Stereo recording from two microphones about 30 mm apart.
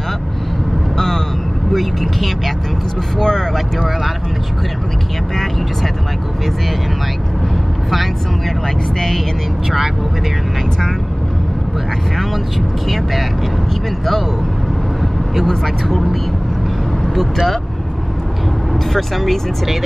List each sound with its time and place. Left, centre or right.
0.9 s vehicle: centre
1.7 s speech: centre
3.2 s speech: left
12.8 s speech: centre
15.4 s speech: centre
18.9 s speech: centre